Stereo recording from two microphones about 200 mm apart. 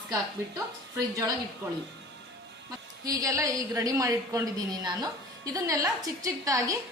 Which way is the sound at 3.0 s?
15° right (ahead or behind).